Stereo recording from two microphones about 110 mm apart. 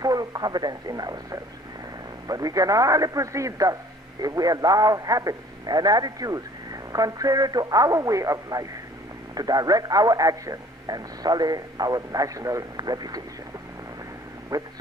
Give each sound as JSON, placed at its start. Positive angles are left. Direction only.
{"t": 0.0, "sound": "a man's voice", "side_deg": -35}
{"t": 14.5, "sound": "a man's voice", "side_deg": -35}